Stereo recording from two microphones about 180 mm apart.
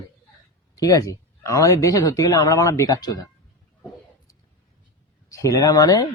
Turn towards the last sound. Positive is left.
turn(degrees=20)  # may be behind; listen again after turning